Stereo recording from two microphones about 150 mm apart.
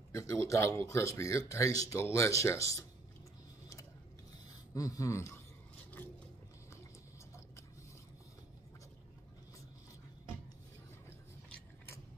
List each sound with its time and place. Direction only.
0.1 s speech: 20° left (ahead or behind)
4.7 s speech: 20° left (ahead or behind)